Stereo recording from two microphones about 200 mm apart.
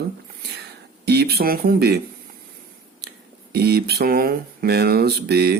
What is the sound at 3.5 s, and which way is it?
Speech, 55° right (ahead or behind).